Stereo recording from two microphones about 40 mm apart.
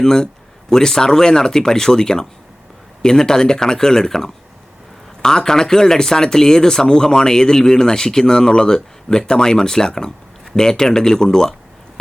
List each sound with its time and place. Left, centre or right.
0.0 s speech: centre